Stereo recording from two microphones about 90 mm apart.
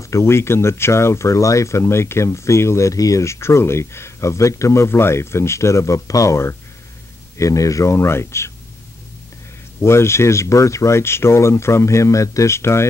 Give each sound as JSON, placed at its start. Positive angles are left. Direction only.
{"t": 0.0, "sound": "speech", "side_deg": 30}
{"t": 9.8, "sound": "speech", "side_deg": 30}